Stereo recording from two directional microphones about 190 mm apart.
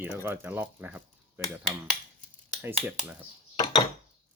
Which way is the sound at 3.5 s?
25° left (ahead or behind).